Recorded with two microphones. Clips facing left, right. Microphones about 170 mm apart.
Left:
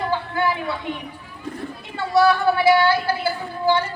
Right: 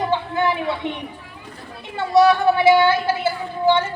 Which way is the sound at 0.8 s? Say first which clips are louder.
Right 2 dB; 25° right (ahead or behind).